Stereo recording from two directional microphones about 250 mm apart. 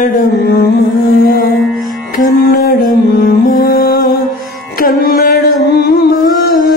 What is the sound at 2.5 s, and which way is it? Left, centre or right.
Music, left.